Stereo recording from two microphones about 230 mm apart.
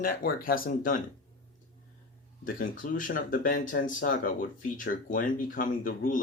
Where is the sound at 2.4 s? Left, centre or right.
Left.